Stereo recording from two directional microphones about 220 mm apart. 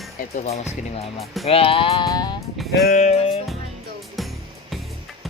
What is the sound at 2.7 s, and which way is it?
Sheep, 45° left (ahead or behind).